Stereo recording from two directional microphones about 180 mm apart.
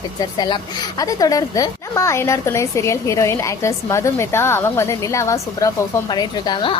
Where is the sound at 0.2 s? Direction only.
25° left (ahead or behind).